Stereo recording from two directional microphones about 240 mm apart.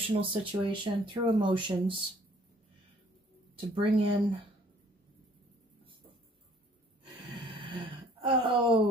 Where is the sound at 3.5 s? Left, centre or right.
Right.